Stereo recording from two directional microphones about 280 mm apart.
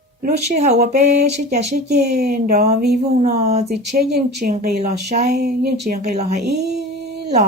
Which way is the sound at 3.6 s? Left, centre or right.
Right.